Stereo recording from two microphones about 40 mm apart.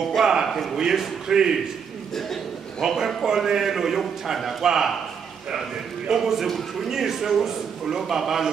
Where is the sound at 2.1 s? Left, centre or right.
Centre.